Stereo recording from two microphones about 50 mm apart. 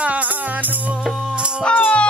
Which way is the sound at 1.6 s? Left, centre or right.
Left.